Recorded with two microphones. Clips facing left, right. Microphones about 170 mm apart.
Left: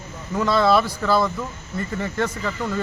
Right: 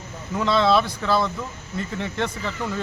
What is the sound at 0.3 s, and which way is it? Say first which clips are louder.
Speech: left 1 dB; centre (ahead or behind).